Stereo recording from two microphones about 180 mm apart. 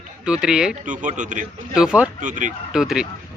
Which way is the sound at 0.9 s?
45° right (ahead or behind).